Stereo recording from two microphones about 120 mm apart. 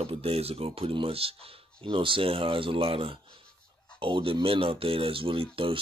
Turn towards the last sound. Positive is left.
turn(degrees=-45)  # may be behind; listen again after turning